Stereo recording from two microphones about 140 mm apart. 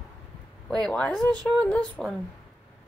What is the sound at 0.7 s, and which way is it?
Speech, 5° left (ahead or behind).